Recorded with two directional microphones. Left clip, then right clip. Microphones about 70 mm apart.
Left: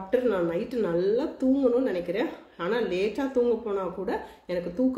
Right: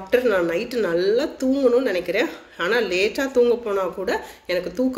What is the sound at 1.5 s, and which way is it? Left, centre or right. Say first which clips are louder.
Speech: right 8 dB; left.